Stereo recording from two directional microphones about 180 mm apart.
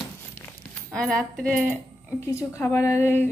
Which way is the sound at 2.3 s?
15° left (ahead or behind).